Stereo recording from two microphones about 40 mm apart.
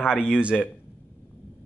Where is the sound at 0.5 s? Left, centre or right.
Centre.